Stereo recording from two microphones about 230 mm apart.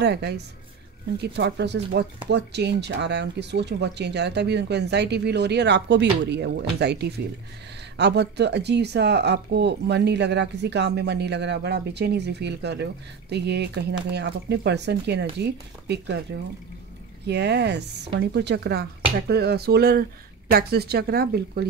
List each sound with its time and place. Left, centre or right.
0.0 s speech: right